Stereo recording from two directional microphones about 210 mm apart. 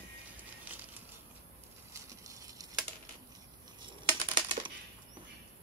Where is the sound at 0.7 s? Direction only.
5° right (ahead or behind).